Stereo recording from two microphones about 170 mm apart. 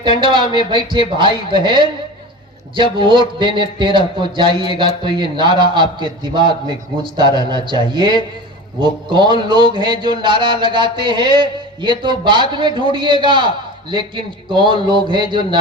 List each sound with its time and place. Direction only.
0.2 s speech: 30° right (ahead or behind)